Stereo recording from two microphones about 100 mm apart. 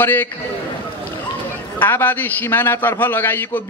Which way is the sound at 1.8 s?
20° left (ahead or behind).